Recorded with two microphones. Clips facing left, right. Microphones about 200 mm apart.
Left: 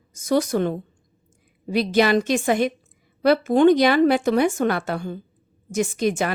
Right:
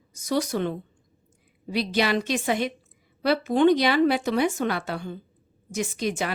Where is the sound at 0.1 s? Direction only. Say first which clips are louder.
Left 5 dB; 50° left (ahead or behind).